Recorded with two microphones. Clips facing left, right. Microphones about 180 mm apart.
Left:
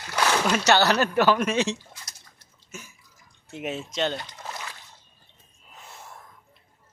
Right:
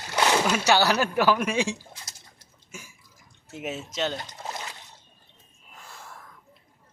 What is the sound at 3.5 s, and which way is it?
Speech, 5° right (ahead or behind).